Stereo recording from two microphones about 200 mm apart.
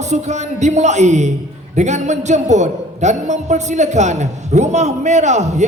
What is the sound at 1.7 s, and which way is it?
A man's voice, 35° right (ahead or behind).